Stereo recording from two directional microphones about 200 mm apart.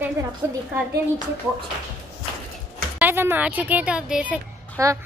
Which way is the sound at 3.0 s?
10° right (ahead or behind).